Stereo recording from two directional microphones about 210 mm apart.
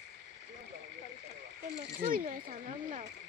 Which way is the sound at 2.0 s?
40° right (ahead or behind).